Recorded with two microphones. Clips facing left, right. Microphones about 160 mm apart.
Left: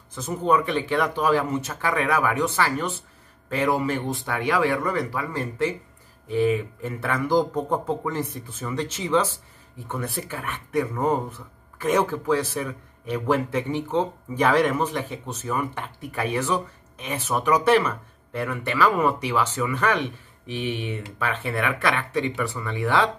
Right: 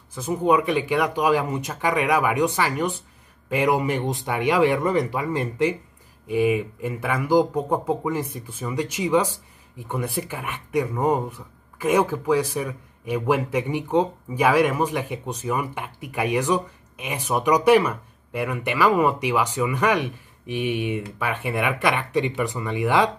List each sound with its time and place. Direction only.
0.1 s speech: 10° right (ahead or behind)